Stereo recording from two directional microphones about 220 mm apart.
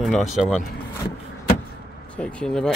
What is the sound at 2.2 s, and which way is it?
Speech, 5° left (ahead or behind).